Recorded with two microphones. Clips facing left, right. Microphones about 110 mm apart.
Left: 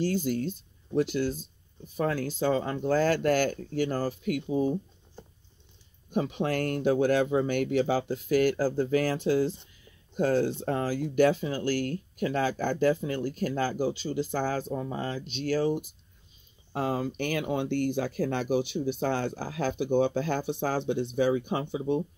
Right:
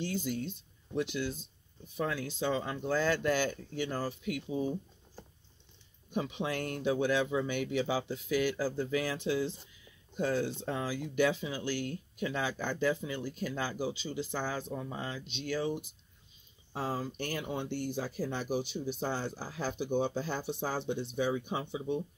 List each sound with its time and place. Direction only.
0.0 s speech: 45° left (ahead or behind)
6.1 s speech: 50° left (ahead or behind)
16.7 s speech: 65° left (ahead or behind)